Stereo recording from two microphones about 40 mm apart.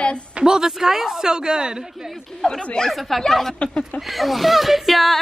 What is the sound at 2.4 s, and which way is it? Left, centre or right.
Speech, centre.